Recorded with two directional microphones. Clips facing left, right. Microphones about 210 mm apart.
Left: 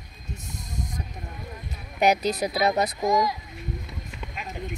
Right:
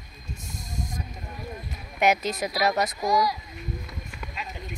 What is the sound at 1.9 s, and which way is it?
Speech, 35° left (ahead or behind).